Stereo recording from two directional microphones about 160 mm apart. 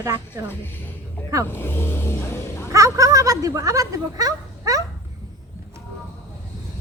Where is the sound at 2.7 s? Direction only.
20° right (ahead or behind).